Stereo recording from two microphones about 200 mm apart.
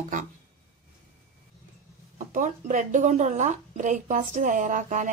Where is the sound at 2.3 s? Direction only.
40° right (ahead or behind).